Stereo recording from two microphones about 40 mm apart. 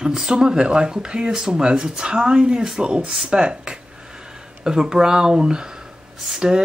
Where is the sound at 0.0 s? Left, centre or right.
Centre.